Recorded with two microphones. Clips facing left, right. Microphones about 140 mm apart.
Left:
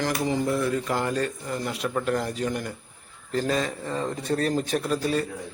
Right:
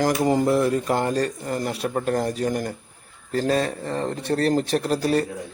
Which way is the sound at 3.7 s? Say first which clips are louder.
Right 3 dB; 65° right (ahead or behind).